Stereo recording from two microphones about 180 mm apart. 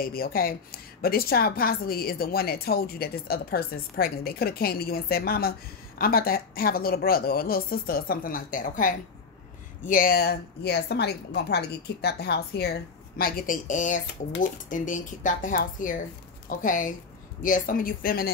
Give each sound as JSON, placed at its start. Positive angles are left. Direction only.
{"t": 0.0, "sound": "a woman's voice", "side_deg": 55}
{"t": 13.2, "sound": "speech", "side_deg": 50}